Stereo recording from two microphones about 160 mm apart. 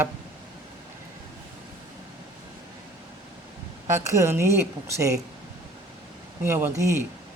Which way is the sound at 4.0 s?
15° right (ahead or behind).